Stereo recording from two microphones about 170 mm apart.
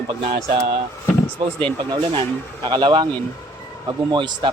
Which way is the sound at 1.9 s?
25° right (ahead or behind).